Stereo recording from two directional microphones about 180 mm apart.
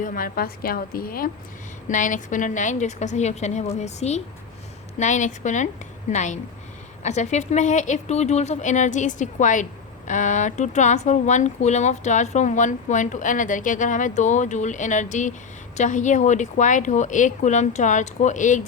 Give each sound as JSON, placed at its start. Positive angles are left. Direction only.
{"t": 0.0, "sound": "a woman's voice", "side_deg": 50}